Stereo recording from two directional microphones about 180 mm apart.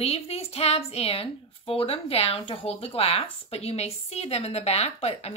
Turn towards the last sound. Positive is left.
turn(degrees=35)  # may be behind; listen again after turning